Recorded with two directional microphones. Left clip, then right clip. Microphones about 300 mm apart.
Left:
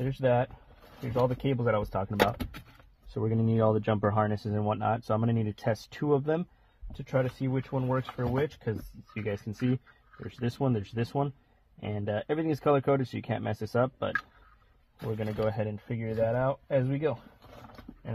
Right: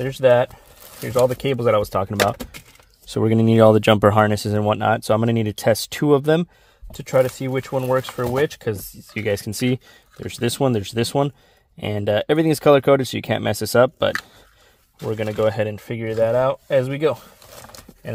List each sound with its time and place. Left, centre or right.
0.0 s speech: right